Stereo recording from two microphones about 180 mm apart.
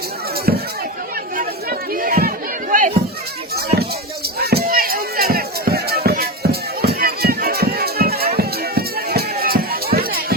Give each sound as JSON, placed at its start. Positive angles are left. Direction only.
{"t": 1.9, "sound": "a sound", "side_deg": -50}
{"t": 4.4, "sound": "chop", "side_deg": -60}
{"t": 8.4, "sound": "music", "side_deg": -60}